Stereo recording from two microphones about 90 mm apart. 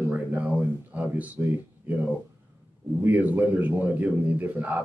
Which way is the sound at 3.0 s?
15° right (ahead or behind).